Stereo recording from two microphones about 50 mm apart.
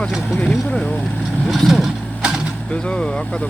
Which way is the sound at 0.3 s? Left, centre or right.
Centre.